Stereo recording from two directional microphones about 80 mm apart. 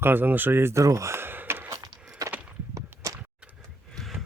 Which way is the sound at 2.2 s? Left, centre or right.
Right.